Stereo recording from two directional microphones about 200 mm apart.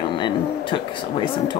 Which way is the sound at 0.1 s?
25° left (ahead or behind).